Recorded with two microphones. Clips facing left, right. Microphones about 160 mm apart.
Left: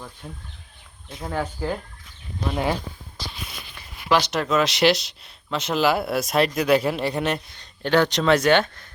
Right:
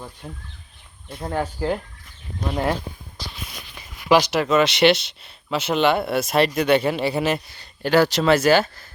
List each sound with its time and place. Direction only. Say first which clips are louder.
0.2 s speech: right 2 dB; 10° right (ahead or behind)
4.1 s speech: right 4 dB; 10° right (ahead or behind)